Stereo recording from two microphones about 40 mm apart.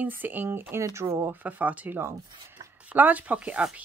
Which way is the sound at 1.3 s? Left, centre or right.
Right.